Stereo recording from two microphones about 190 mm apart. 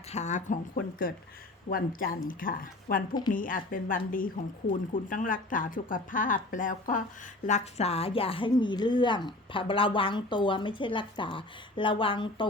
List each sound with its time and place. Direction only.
0.1 s a woman's voice: 35° left (ahead or behind)